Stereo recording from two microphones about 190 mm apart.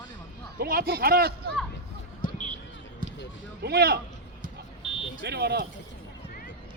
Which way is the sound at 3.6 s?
55° right (ahead or behind).